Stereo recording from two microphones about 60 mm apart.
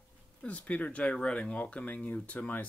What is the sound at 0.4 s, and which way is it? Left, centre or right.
Speech, left.